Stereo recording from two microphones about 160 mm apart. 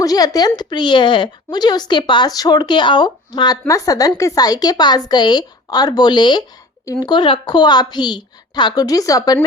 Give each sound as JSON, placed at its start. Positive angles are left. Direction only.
{"t": 0.0, "sound": "a woman's voice", "side_deg": 20}